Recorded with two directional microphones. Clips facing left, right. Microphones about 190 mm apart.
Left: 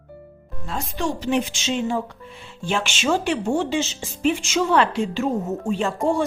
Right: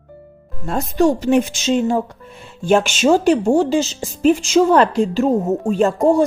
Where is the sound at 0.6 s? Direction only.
45° right (ahead or behind).